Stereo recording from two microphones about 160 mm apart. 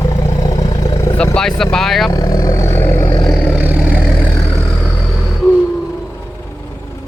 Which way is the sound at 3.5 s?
10° right (ahead or behind).